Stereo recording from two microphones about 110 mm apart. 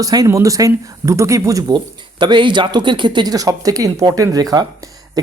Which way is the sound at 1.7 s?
45° right (ahead or behind).